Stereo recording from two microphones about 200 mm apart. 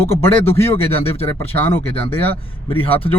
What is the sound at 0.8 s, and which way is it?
Speech, 30° left (ahead or behind).